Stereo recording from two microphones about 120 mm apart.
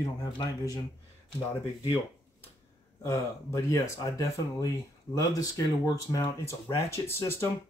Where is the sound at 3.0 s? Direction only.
25° left (ahead or behind).